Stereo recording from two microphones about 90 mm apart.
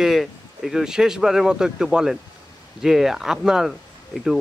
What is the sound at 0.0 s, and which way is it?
Speech, centre (ahead or behind).